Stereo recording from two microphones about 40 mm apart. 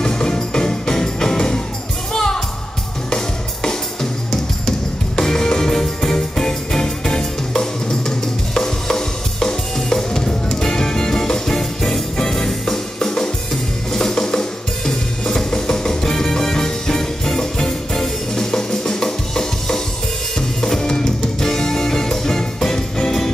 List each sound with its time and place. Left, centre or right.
0.0 s music: centre
8.5 s drum kit: centre
12.2 s music: centre